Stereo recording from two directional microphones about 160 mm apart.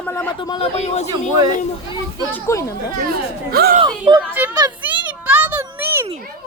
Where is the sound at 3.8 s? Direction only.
25° right (ahead or behind).